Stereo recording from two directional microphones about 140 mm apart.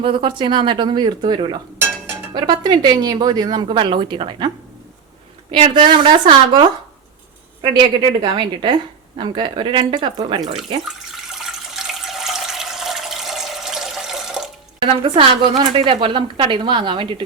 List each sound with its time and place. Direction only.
0.0 s a woman's voice: 35° right (ahead or behind)
5.5 s a woman's voice: 40° right (ahead or behind)
10.8 s water: 5° right (ahead or behind)
14.8 s a woman's voice: 40° right (ahead or behind)